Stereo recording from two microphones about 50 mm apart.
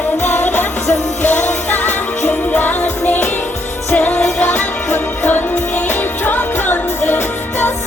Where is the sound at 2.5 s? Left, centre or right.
Left.